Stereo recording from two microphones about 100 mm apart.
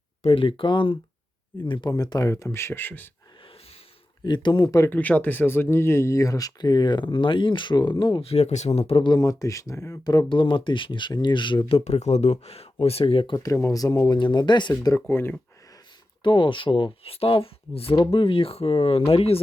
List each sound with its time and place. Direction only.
0.3 s speech: 60° left (ahead or behind)
1.9 s speech: 40° left (ahead or behind); by 3.1 s 20° left (ahead or behind)
4.2 s speech: 50° left (ahead or behind)
4.9 s speech: 15° left (ahead or behind); by 8.2 s 50° left (ahead or behind)
8.2 s speech: 90° left
9.0 s speech: 35° left (ahead or behind)
10.2 s speech: 55° left (ahead or behind)
11.9 s speech: 90° left; by 13.3 s 70° left (ahead or behind)
13.3 s speech: 35° left (ahead or behind)
14.1 s speech: 50° left (ahead or behind)
14.7 s speech: 30° left (ahead or behind)
16.2 s speech: 50° left (ahead or behind); by 17.9 s 70° left (ahead or behind)
17.9 s speech: 55° left (ahead or behind); by 19.4 s 75° left (ahead or behind)